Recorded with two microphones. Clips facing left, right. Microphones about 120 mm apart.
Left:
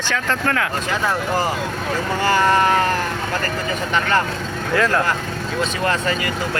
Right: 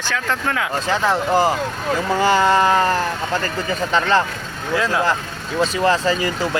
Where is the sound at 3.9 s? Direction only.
25° right (ahead or behind).